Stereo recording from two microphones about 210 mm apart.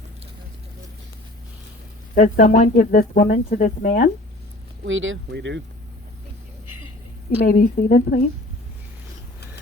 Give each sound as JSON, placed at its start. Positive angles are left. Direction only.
{"t": 2.1, "sound": "speech", "side_deg": 35}
{"t": 4.9, "sound": "speech", "side_deg": -65}
{"t": 7.3, "sound": "speech", "side_deg": 45}